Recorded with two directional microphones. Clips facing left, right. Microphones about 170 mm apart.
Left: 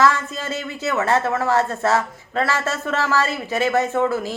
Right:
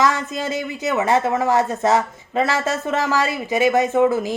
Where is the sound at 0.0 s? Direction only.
15° right (ahead or behind).